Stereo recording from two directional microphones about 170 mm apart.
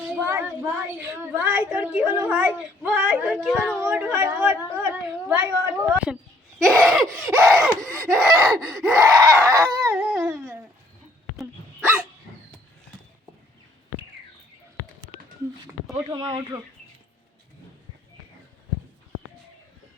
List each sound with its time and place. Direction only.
0.1 s a sound: 10° right (ahead or behind)
0.6 s speech: 10° right (ahead or behind)
3.3 s laughter: 5° left (ahead or behind)
3.8 s speech: 10° right (ahead or behind)
6.7 s laughter: centre (ahead or behind)
8.4 s a sound: 10° right (ahead or behind)
15.9 s speech: 25° right (ahead or behind)